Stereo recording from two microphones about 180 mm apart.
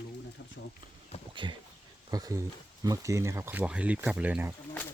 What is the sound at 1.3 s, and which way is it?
Speech, 25° right (ahead or behind).